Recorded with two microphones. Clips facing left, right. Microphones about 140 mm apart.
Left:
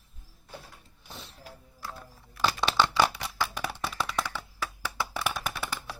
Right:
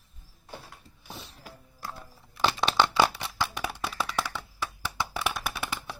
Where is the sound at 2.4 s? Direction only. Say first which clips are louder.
Right 1 dB; 20° right (ahead or behind).